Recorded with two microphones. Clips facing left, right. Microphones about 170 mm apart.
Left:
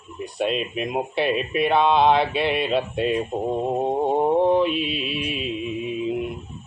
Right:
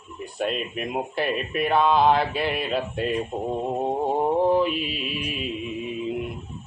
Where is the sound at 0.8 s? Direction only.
20° left (ahead or behind).